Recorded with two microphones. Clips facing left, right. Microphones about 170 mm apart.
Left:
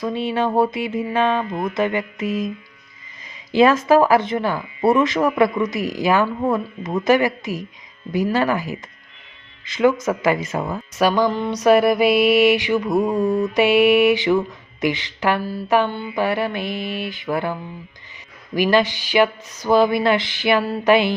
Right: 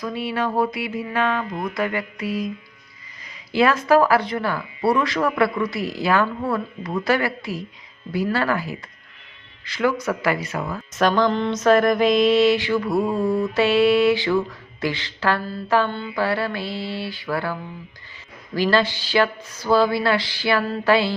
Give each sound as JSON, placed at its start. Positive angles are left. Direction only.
{"t": 0.0, "sound": "speech", "side_deg": 25}
{"t": 3.5, "sound": "speech", "side_deg": 20}
{"t": 10.9, "sound": "mantra", "side_deg": 10}